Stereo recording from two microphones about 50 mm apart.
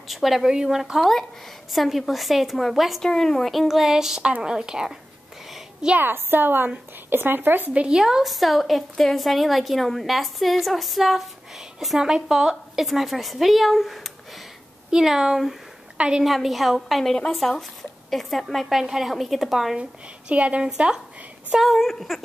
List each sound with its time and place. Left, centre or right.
0.1 s a woman's voice: centre
3.0 s a woman's voice: centre
3.5 s a woman's voice: centre
5.9 s a woman's voice: right
7.7 s speech: right
8.0 s a woman's voice: centre
16.3 s a woman's voice: centre
19.8 s a woman's voice: right
21.5 s a woman's voice: centre